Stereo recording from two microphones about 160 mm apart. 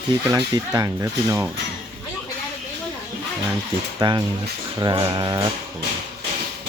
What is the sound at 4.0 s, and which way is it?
Speech, 25° right (ahead or behind).